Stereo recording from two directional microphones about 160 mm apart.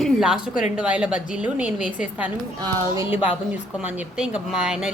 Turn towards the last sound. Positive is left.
turn(degrees=-5)  # may be behind; listen again after turning